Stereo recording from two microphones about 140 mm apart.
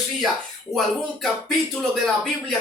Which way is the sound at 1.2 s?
5° left (ahead or behind).